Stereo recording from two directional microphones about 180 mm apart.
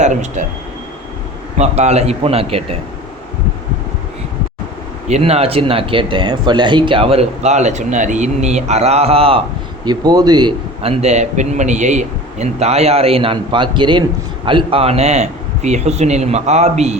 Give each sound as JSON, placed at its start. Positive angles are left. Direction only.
{"t": 0.0, "sound": "speech", "side_deg": -40}
{"t": 1.5, "sound": "speech", "side_deg": -40}
{"t": 5.0, "sound": "speech", "side_deg": -35}